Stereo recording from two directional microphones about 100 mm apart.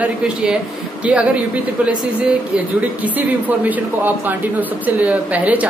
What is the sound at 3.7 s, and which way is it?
Speech, 20° right (ahead or behind).